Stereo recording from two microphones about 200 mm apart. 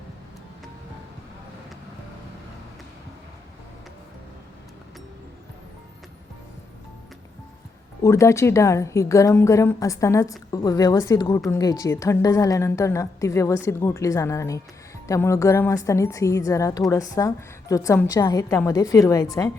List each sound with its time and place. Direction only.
8.0 s a woman's voice: 15° left (ahead or behind)